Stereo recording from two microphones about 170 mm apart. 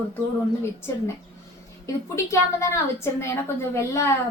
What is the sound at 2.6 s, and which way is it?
A woman's voice, 15° left (ahead or behind).